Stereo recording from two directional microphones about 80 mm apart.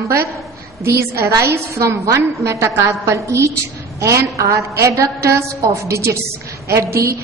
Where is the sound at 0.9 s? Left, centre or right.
Right.